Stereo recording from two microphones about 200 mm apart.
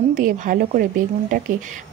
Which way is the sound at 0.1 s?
40° right (ahead or behind).